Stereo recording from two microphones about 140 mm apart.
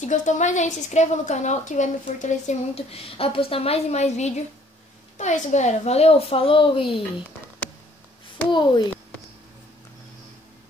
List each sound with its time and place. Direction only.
0.0 s a woman's voice: 60° left (ahead or behind); by 7.0 s 40° left (ahead or behind)
8.5 s a child's voice: 35° left (ahead or behind)